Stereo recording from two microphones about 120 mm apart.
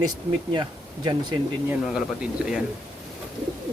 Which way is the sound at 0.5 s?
40° right (ahead or behind).